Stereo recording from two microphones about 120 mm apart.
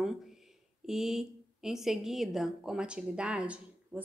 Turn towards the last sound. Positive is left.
turn(degrees=-10)  # may be behind; listen again after turning